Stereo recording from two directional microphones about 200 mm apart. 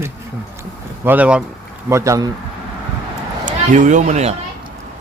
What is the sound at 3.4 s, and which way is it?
Speech, 40° right (ahead or behind).